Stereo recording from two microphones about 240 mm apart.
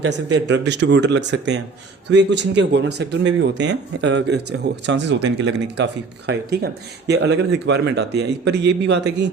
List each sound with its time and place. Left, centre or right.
0.5 s speech: right